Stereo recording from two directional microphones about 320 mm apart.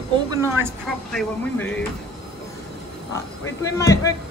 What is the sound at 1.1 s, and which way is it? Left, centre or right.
Speech, centre.